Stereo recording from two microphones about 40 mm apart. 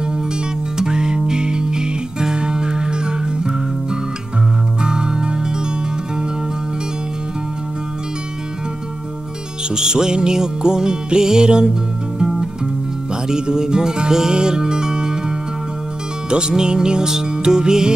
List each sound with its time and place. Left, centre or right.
0.7 s music: centre
9.8 s music: centre
13.3 s music: centre